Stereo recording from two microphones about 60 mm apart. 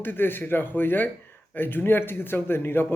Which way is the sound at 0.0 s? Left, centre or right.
Left.